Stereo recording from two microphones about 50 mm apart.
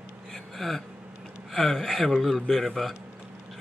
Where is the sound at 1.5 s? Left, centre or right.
Centre.